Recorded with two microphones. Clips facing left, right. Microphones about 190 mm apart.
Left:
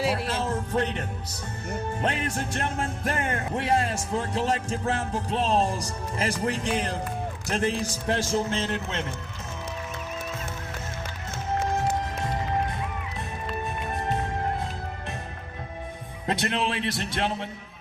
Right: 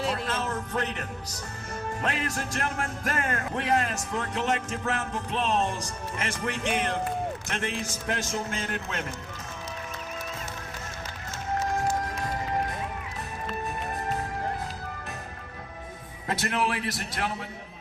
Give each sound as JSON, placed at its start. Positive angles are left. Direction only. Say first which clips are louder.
{"t": 0.0, "sound": "music", "louder": "left 3 dB", "side_deg": 10}
{"t": 0.3, "sound": "a man's voice", "louder": "left 3 dB", "side_deg": 30}
{"t": 11.6, "sound": "music", "louder": "left 1 dB", "side_deg": 25}
{"t": 16.2, "sound": "a man's voice", "louder": "left 1 dB", "side_deg": 25}